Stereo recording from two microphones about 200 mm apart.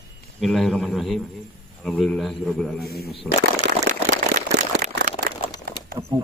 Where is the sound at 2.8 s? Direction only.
50° left (ahead or behind).